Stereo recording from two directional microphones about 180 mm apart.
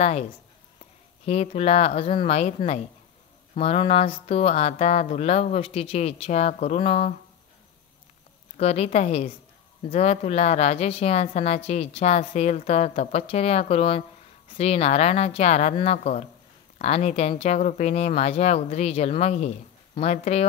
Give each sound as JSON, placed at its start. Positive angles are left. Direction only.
{"t": 1.2, "sound": "a woman's voice", "side_deg": 35}
{"t": 8.5, "sound": "a woman's voice", "side_deg": 35}